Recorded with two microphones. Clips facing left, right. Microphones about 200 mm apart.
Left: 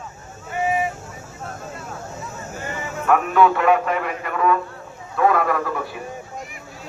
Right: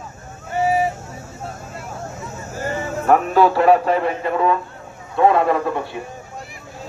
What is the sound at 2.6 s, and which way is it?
A man's voice, 35° right (ahead or behind).